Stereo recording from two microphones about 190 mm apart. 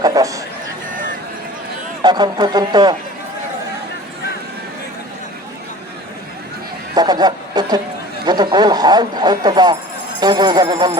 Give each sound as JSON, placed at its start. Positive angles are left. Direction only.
{"t": 0.0, "sound": "speech", "side_deg": -20}
{"t": 2.0, "sound": "speech", "side_deg": -25}
{"t": 6.9, "sound": "speech", "side_deg": -20}